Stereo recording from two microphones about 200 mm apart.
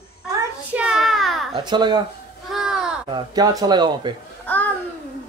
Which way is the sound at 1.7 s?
20° right (ahead or behind).